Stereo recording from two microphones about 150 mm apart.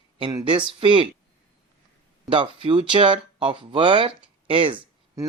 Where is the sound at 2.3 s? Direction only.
35° right (ahead or behind).